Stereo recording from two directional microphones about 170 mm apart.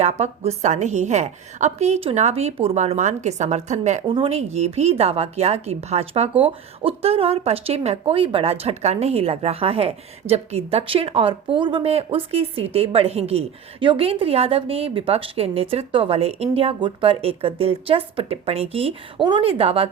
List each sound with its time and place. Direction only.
0.0 s a woman's voice: 40° right (ahead or behind)
4.0 s a woman's voice: 30° right (ahead or behind)